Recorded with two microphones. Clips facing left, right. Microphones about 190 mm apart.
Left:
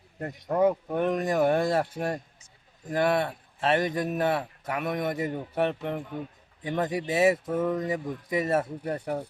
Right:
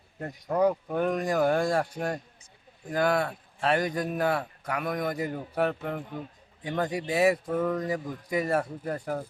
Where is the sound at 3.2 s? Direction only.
25° left (ahead or behind).